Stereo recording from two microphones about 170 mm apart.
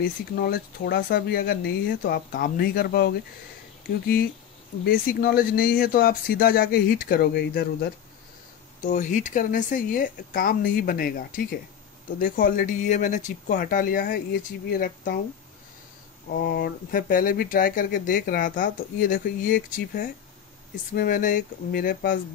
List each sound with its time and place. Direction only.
0.4 s speech: 65° left (ahead or behind)
4.8 s speech: 60° left (ahead or behind)
8.8 s speech: 50° left (ahead or behind)
16.3 s speech: 60° left (ahead or behind)